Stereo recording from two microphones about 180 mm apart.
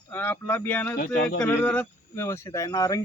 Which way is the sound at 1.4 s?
10° left (ahead or behind).